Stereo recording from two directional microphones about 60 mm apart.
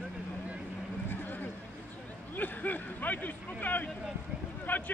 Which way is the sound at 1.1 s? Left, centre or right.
Left.